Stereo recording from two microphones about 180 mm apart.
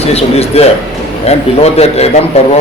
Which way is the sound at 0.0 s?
35° left (ahead or behind).